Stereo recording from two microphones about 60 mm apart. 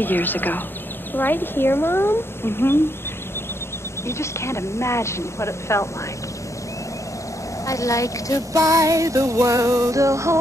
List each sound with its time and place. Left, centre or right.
0.0 s speech: left
4.1 s speech: left
7.6 s a woman's voice: left
8.5 s music: right